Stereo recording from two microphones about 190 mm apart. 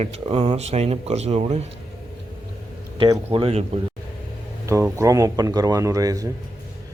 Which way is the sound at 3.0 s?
20° right (ahead or behind).